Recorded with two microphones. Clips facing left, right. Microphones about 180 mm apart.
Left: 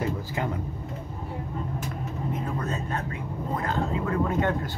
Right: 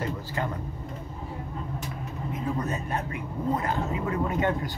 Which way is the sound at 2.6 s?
15° right (ahead or behind).